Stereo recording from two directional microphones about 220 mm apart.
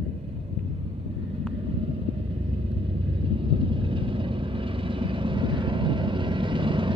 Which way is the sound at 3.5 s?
25° right (ahead or behind).